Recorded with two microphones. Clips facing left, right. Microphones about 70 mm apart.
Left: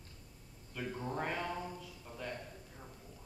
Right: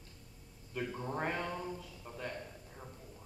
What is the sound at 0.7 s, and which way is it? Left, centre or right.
Speech, centre.